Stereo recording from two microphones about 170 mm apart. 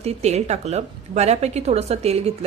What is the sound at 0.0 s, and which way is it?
Speech, 40° right (ahead or behind).